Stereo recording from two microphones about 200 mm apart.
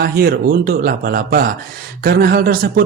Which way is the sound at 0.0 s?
45° right (ahead or behind).